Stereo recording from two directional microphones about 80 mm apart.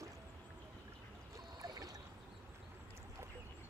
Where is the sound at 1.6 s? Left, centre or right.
Right.